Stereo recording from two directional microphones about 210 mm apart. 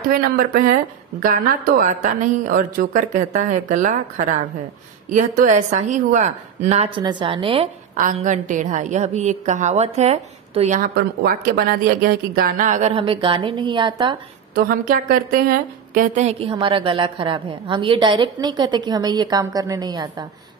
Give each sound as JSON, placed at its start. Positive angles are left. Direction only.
{"t": 0.1, "sound": "a woman's voice", "side_deg": -45}
{"t": 7.0, "sound": "a woman's voice", "side_deg": -20}
{"t": 10.8, "sound": "a woman's voice", "side_deg": -45}
{"t": 14.5, "sound": "a woman's voice", "side_deg": -45}